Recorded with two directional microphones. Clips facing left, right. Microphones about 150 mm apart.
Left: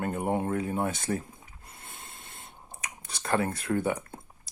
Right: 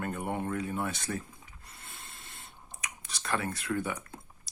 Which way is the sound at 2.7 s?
25° left (ahead or behind).